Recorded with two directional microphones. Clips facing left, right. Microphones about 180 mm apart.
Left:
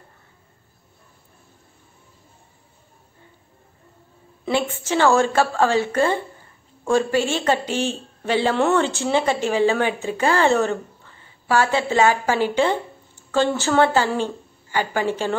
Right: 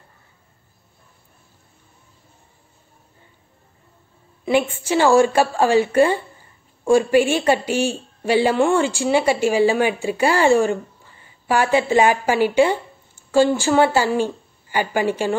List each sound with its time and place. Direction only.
4.8 s a woman's voice: 15° right (ahead or behind)